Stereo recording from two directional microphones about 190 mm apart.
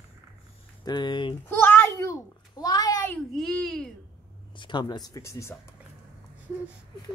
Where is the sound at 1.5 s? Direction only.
10° left (ahead or behind).